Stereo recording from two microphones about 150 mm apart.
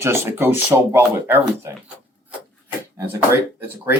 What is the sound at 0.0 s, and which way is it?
Speech, 15° right (ahead or behind).